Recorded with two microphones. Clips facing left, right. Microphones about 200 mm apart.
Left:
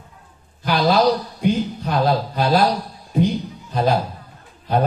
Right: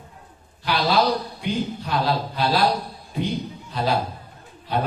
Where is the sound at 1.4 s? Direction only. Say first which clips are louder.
Left 6 dB; 45° left (ahead or behind).